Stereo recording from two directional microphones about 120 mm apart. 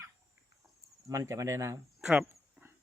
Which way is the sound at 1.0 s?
25° right (ahead or behind).